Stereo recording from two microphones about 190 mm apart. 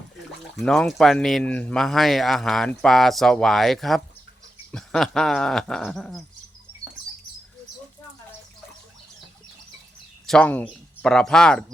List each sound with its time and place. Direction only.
0.5 s speech: centre (ahead or behind)
10.2 s speech: 5° left (ahead or behind)